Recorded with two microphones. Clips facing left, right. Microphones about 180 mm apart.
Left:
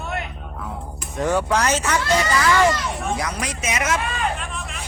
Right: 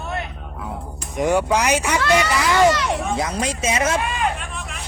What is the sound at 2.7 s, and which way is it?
Speech, 75° right (ahead or behind).